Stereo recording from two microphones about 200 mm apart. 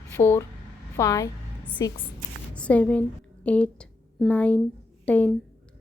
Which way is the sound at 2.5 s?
5° left (ahead or behind).